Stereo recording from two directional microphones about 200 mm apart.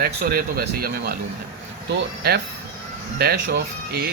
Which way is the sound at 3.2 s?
55° right (ahead or behind).